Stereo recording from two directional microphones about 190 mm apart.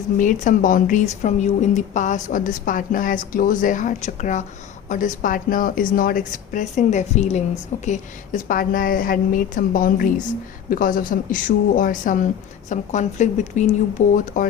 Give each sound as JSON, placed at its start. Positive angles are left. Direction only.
{"t": 0.2, "sound": "a woman's voice", "side_deg": 45}